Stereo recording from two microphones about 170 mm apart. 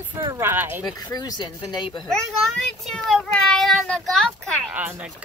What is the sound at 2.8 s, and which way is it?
Speech, 5° left (ahead or behind).